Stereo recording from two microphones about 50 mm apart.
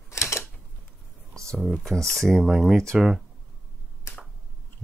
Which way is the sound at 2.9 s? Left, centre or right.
Centre.